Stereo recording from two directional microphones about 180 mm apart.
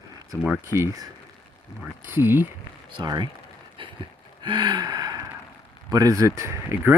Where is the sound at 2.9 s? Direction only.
25° right (ahead or behind).